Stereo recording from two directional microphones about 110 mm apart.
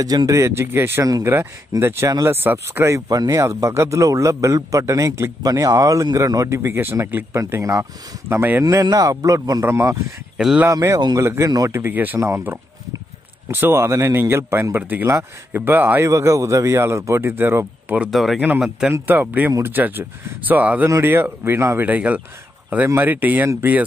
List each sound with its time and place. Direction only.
0.0 s a man's voice: 35° right (ahead or behind)
3.1 s a man's voice: 35° right (ahead or behind)
8.6 s speech: 30° right (ahead or behind)
10.3 s speech: 10° right (ahead or behind)
10.7 s a man's voice: 30° right (ahead or behind)
16.1 s a man's voice: 30° right (ahead or behind)
18.1 s speech: centre (ahead or behind)
18.9 s a man's voice: 15° right (ahead or behind)